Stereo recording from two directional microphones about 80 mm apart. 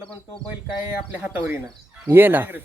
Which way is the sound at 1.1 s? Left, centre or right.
Centre.